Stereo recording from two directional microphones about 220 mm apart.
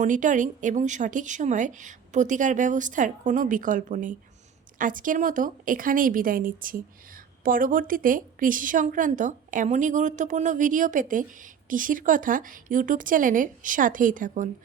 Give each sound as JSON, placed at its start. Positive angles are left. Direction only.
{"t": 0.0, "sound": "speech", "side_deg": -35}